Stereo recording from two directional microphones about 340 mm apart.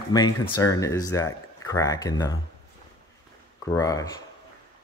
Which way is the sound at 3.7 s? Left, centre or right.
Centre.